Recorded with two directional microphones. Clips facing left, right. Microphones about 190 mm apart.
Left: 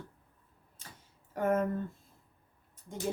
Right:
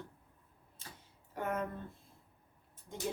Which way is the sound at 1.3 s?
45° left (ahead or behind).